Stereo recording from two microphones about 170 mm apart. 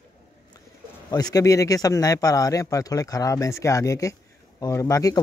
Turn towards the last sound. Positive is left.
turn(degrees=20)  # may be behind; listen again after turning